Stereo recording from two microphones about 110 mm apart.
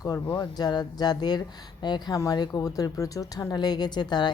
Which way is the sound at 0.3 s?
40° left (ahead or behind).